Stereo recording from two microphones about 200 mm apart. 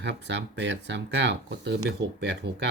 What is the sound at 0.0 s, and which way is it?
Speech, 60° right (ahead or behind).